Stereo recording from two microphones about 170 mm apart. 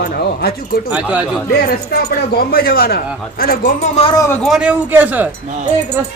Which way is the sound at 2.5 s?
65° left (ahead or behind).